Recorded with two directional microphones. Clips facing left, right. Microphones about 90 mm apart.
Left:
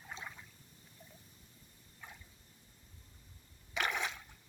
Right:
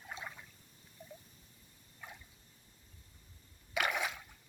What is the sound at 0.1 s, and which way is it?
Trickle, 5° right (ahead or behind).